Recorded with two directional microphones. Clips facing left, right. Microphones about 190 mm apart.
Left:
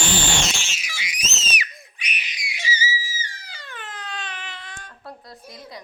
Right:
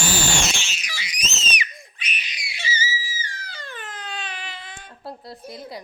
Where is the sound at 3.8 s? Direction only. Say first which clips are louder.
Left 1 dB; 10° right (ahead or behind).